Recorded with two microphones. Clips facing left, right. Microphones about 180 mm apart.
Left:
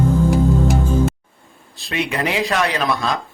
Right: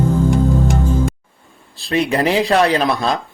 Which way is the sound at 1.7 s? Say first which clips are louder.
Right 6 dB; 35° right (ahead or behind).